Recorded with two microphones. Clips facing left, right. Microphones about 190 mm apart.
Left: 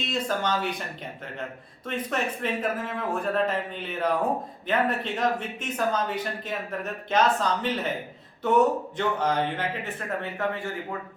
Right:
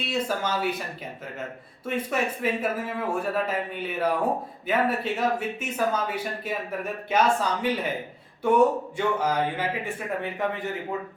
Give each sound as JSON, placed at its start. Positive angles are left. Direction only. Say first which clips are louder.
{"t": 0.0, "sound": "speech", "louder": "even", "side_deg": -10}
{"t": 1.9, "sound": "speech", "louder": "right 2 dB", "side_deg": -10}